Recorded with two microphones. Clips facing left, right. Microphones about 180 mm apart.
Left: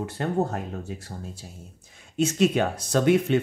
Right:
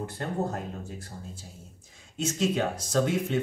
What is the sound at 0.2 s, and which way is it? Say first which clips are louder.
Speech: left 5 dB; 75° left (ahead or behind).